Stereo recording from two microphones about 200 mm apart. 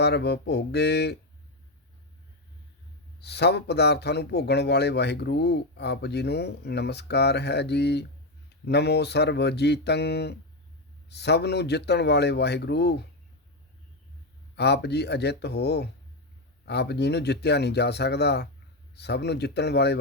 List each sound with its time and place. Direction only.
0.0 s speech: 55° left (ahead or behind)
3.2 s speech: 55° left (ahead or behind)
14.5 s speech: 55° left (ahead or behind)